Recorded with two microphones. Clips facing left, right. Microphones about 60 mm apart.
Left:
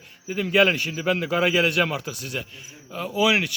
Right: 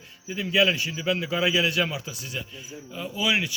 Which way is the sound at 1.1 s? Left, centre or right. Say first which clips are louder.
Left 3 dB; left.